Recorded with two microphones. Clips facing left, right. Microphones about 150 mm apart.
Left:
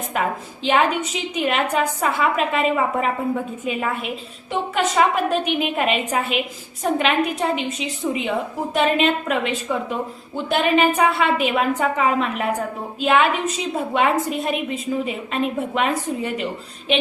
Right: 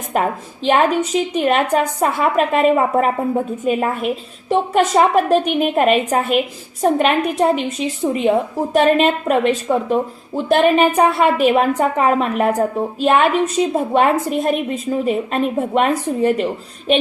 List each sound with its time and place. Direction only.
0.1 s a woman's voice: 40° right (ahead or behind)